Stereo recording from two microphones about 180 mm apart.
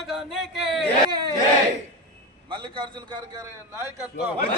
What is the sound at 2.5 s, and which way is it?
Speech, 25° right (ahead or behind).